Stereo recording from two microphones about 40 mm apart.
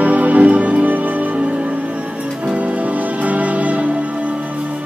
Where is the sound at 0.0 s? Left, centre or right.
Right.